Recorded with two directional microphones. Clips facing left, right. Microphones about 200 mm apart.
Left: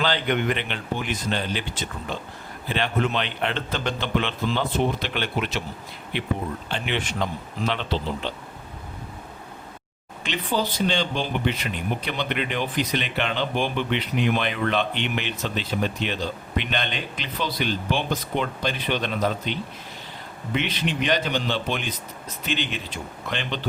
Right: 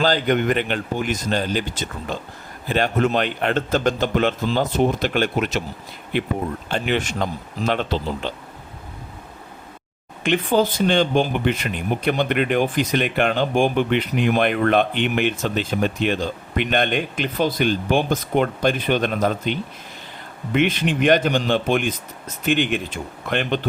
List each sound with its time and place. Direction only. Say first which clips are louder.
0.0 s speech: right 5 dB; 45° right (ahead or behind)
10.2 s speech: right 8 dB; 50° right (ahead or behind)